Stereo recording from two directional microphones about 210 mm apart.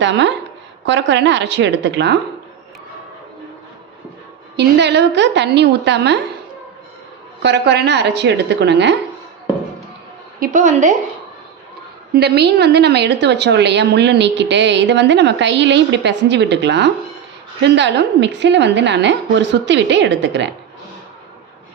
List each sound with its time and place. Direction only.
0.0 s a woman's voice: 60° right (ahead or behind)
4.5 s a woman's voice: 55° right (ahead or behind)
7.4 s a woman's voice: 55° right (ahead or behind)
10.4 s a woman's voice: 35° right (ahead or behind)
12.1 s a woman's voice: 50° right (ahead or behind)